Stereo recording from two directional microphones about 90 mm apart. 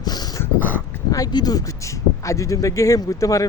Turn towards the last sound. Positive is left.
turn(degrees=40)  # may be behind; listen again after turning